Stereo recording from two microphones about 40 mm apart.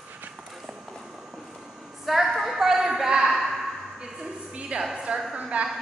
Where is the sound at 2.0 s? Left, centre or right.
Centre.